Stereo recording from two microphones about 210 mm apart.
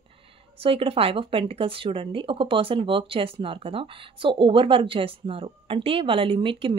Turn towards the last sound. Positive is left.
turn(degrees=-25)  # may be behind; listen again after turning